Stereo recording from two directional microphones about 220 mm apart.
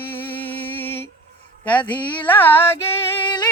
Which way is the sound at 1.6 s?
5° left (ahead or behind).